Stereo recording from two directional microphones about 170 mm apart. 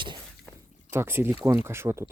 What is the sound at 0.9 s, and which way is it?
Speech, 15° right (ahead or behind).